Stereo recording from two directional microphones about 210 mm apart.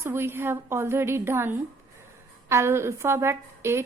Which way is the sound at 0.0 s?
10° right (ahead or behind).